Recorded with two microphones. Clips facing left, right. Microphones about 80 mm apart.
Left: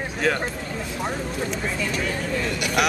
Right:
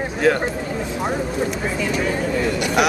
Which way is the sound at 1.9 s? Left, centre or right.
Centre.